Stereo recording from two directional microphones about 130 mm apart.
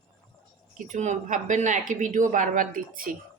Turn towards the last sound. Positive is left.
turn(degrees=-90)